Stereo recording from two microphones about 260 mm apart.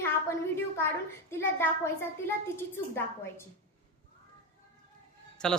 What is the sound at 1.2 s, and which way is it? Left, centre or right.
A woman's voice, centre.